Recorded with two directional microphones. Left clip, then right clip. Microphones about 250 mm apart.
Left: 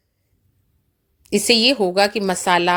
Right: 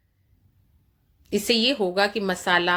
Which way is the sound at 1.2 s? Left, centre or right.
Left.